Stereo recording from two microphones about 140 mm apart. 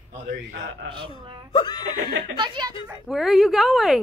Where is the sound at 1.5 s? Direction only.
35° left (ahead or behind).